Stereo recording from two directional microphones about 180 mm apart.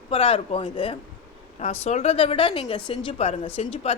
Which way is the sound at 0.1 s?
30° left (ahead or behind).